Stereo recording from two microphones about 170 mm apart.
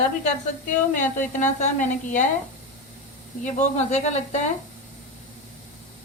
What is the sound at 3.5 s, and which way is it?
Speech, 45° left (ahead or behind).